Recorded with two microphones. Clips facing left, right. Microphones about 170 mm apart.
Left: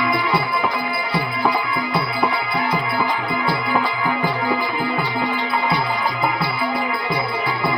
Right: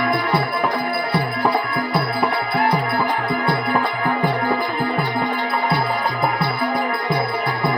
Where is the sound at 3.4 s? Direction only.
55° right (ahead or behind).